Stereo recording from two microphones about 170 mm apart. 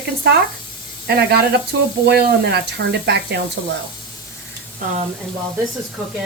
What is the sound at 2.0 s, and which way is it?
Speech, 75° right (ahead or behind).